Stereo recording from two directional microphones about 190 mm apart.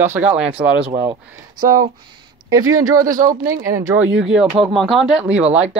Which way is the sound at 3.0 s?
45° right (ahead or behind).